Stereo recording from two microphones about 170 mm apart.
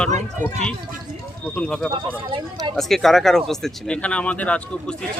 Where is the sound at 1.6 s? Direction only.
5° left (ahead or behind).